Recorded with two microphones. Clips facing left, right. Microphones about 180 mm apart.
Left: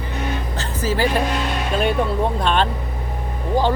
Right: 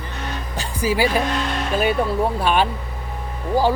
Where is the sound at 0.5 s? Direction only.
15° right (ahead or behind).